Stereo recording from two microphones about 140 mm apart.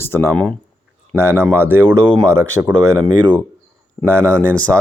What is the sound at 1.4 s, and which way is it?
Speech, 15° right (ahead or behind).